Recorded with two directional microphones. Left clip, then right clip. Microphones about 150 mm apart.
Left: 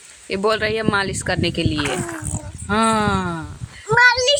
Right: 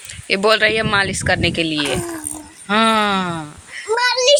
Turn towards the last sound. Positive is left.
turn(degrees=-40)  # may be behind; listen again after turning